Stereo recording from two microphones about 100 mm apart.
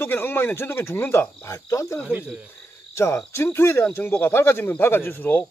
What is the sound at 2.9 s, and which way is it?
Hoot, 30° left (ahead or behind).